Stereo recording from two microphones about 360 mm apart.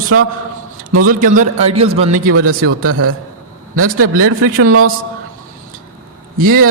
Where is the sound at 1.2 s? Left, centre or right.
Right.